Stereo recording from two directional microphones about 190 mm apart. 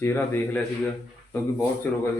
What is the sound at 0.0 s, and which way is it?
Speech, 10° left (ahead or behind).